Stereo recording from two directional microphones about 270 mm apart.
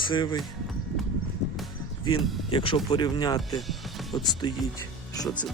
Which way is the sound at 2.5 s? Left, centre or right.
Centre.